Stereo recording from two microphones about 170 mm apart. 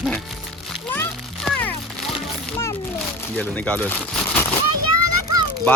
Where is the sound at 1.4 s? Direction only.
10° left (ahead or behind).